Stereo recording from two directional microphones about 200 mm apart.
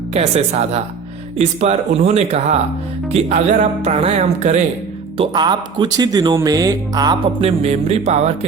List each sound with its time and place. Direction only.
0.1 s speech: 35° right (ahead or behind)